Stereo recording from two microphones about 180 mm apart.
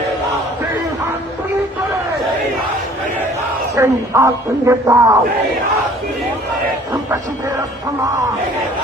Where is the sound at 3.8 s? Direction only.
15° right (ahead or behind).